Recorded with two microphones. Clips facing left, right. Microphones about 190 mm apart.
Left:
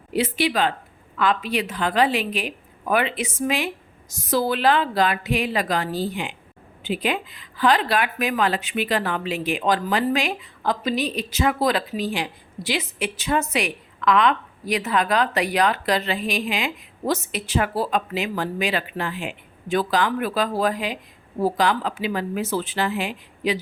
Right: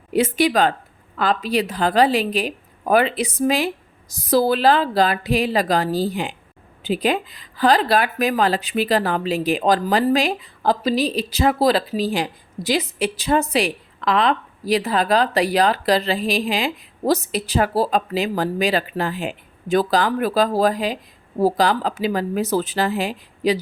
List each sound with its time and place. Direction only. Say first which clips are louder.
0.1 s speech: right 5 dB; 45° right (ahead or behind)